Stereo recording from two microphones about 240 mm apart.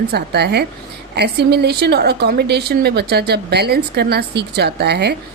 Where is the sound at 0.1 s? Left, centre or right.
Right.